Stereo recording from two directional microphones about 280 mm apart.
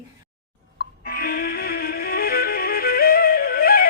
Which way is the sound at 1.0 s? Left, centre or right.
Left.